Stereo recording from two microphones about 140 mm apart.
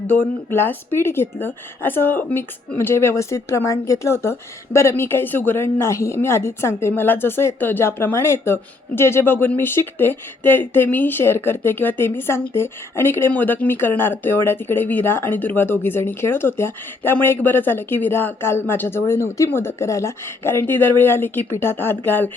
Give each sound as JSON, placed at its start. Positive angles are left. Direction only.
{"t": 0.5, "sound": "speech", "side_deg": 15}